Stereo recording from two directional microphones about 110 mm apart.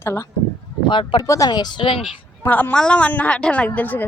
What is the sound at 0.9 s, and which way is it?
Music, 50° left (ahead or behind).